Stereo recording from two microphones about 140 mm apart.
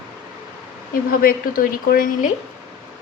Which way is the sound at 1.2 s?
90° left.